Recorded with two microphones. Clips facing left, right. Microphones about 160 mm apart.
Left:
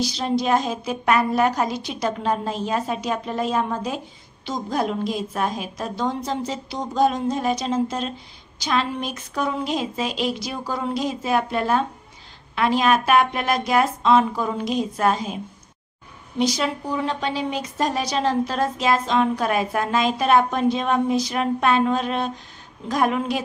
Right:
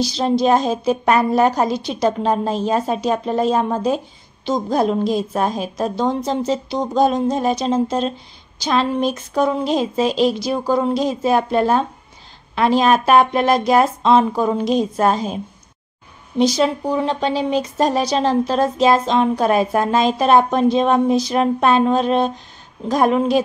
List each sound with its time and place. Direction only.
0.0 s a woman's voice: 30° right (ahead or behind)